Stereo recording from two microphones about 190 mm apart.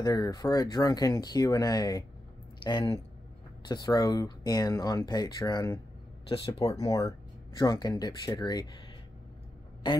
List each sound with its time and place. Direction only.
0.0 s speech: 20° left (ahead or behind)
6.2 s speech: 30° left (ahead or behind)
6.8 s speech: 15° left (ahead or behind)